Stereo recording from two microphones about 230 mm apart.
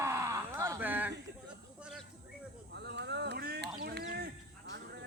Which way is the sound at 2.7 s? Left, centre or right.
Right.